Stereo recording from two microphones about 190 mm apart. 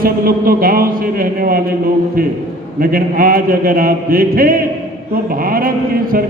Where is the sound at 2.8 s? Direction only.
50° right (ahead or behind).